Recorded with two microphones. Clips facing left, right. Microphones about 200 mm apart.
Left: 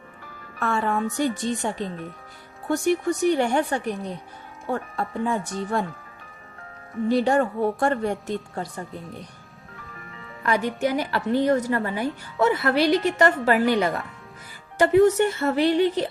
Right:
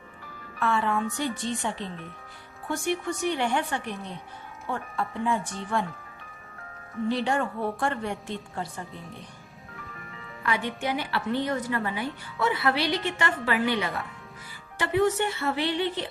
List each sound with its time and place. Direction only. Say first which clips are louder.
0.6 s a woman's voice: left 2 dB; 45° left (ahead or behind)
7.1 s a woman's voice: left 7 dB; 40° left (ahead or behind)
10.4 s a woman's voice: left 6 dB; 40° left (ahead or behind)